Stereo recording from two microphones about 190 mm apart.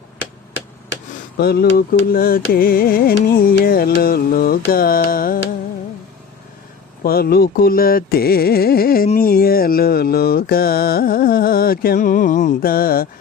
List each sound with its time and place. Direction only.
1.4 s carnatic music: 55° left (ahead or behind)
7.0 s carnatic music: 50° left (ahead or behind)